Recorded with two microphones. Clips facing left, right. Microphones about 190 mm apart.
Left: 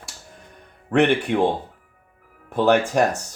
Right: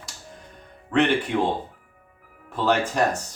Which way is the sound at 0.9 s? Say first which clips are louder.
Left 3 dB; 55° left (ahead or behind).